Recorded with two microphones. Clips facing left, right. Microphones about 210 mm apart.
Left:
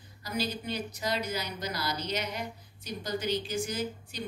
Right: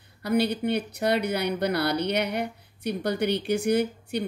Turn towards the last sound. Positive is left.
turn(degrees=-65)  # may be behind; listen again after turning